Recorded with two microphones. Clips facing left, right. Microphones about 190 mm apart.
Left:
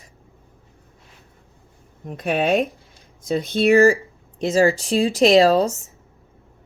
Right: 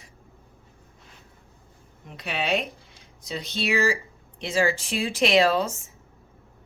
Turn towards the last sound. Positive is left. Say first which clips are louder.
# left 7 dB
turn(degrees=35)  # may be behind; listen again after turning